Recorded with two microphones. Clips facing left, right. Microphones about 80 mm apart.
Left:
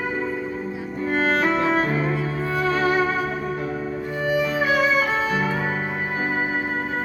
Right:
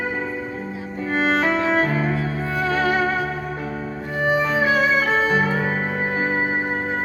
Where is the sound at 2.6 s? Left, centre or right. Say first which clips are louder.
Even; left.